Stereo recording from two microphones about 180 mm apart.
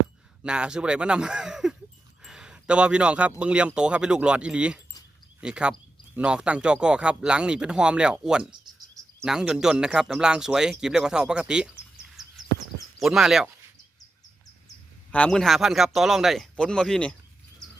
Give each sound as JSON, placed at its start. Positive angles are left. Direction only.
{"t": 0.4, "sound": "speech", "side_deg": -5}
{"t": 12.2, "sound": "a sound", "side_deg": 0}
{"t": 13.0, "sound": "speech", "side_deg": 0}
{"t": 15.1, "sound": "speech", "side_deg": 5}